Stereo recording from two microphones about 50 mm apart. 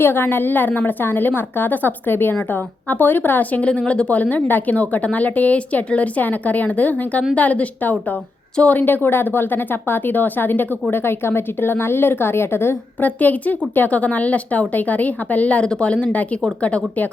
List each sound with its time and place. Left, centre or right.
0.0 s a woman's voice: left
3.6 s a woman's voice: left
13.0 s a woman's voice: left